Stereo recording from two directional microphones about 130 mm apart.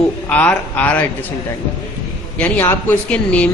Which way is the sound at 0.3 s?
10° left (ahead or behind).